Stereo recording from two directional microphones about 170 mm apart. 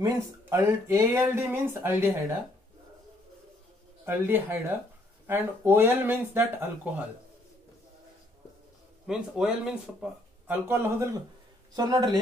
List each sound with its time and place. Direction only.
0.0 s speech: 15° right (ahead or behind)
4.0 s speech: 10° right (ahead or behind)
9.0 s speech: 5° right (ahead or behind); by 12.2 s 20° right (ahead or behind)